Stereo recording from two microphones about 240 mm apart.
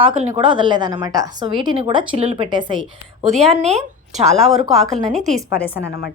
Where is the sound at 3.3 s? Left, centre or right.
Centre.